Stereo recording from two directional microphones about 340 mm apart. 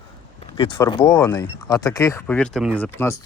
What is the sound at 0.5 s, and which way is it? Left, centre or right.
Speech, centre.